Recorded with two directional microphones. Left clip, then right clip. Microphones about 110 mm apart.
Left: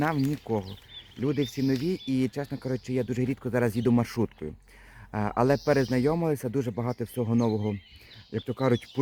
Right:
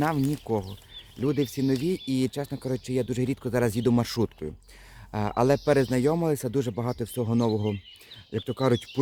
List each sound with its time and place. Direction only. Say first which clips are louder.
0.0 s speech: right 1 dB; 15° right (ahead or behind)